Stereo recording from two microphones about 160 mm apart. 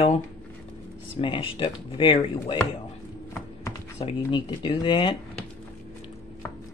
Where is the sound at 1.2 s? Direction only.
30° left (ahead or behind).